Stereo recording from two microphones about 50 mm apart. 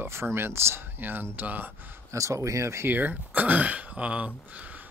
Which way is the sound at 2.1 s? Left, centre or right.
Right.